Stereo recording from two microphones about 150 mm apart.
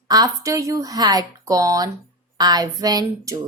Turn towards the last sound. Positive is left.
turn(degrees=-25)  # may be behind; listen again after turning